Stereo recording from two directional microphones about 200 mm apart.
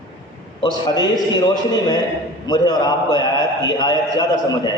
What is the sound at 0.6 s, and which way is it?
Speech, 20° left (ahead or behind).